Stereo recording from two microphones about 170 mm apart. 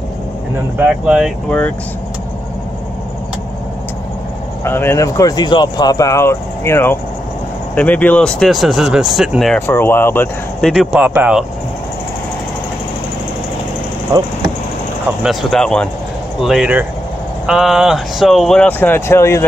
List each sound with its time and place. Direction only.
0.7 s speech: 5° right (ahead or behind)
4.6 s speech: 15° left (ahead or behind)
9.6 s speech: 15° left (ahead or behind); by 11.4 s 10° right (ahead or behind)
15.2 s speech: 5° left (ahead or behind)